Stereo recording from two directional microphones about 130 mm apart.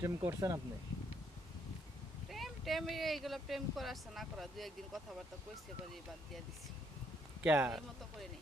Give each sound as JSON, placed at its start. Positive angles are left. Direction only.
{"t": 0.0, "sound": "speech", "side_deg": -20}
{"t": 2.3, "sound": "speech", "side_deg": 0}
{"t": 7.4, "sound": "speech", "side_deg": -15}